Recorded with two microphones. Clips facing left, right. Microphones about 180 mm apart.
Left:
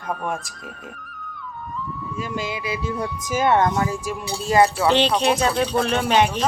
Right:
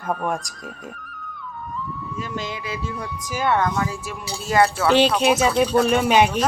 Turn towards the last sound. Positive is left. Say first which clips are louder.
# right 2 dB
turn(degrees=-10)  # may be behind; listen again after turning